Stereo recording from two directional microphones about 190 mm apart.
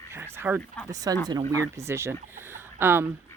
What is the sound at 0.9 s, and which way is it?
Speech, 20° right (ahead or behind).